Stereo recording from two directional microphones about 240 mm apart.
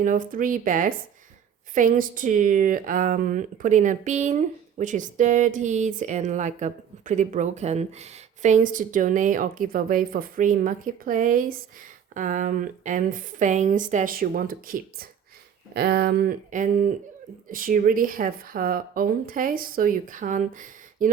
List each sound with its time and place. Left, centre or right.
0.0 s speech: right